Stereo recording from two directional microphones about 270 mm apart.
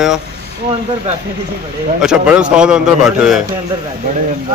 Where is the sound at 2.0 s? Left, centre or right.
Centre.